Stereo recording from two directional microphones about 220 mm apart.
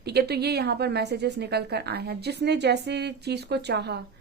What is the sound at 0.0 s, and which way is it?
Speech, 45° right (ahead or behind).